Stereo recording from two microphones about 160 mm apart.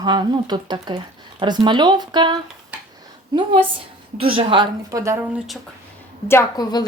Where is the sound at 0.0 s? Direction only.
25° right (ahead or behind).